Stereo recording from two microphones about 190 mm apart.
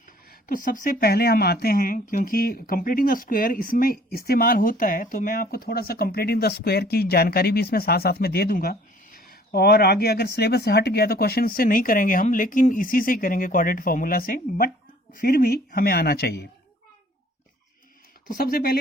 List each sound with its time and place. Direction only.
0.3 s speech: 45° left (ahead or behind)
18.3 s speech: 50° left (ahead or behind)